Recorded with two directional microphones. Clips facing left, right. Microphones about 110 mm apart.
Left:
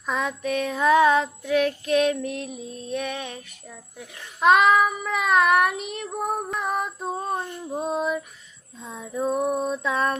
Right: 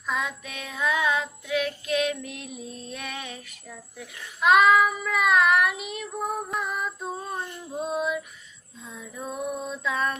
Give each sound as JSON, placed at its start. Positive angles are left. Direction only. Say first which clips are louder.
{"t": 0.0, "sound": "a child's voice", "louder": "left 4 dB", "side_deg": 35}
{"t": 2.8, "sound": "a child's voice", "louder": "left 10 dB", "side_deg": 25}
{"t": 7.9, "sound": "a child's voice", "louder": "left 2 dB", "side_deg": 35}
{"t": 8.9, "sound": "female singing", "louder": "left 10 dB", "side_deg": 30}
{"t": 9.3, "sound": "a child's voice", "louder": "left 6 dB", "side_deg": 40}